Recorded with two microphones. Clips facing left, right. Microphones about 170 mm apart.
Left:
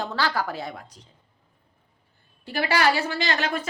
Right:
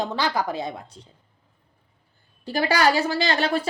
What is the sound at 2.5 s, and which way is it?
A woman's voice, 35° right (ahead or behind).